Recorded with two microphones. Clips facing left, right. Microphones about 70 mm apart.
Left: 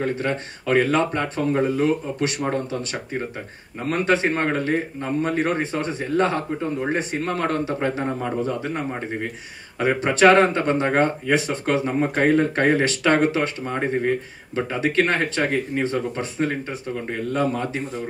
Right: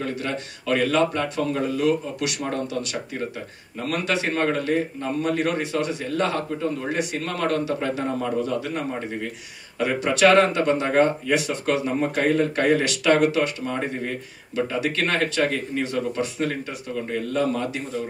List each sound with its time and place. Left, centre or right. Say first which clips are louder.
0.0 s speech: left 4 dB; left